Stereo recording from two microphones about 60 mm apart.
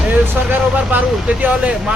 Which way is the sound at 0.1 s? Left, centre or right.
Right.